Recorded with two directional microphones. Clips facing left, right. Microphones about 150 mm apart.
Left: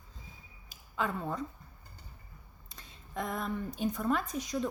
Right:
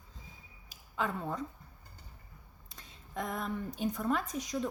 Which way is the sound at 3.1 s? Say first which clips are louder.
Left 1 dB; 15° right (ahead or behind).